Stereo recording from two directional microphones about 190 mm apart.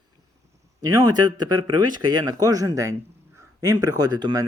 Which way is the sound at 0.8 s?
20° right (ahead or behind).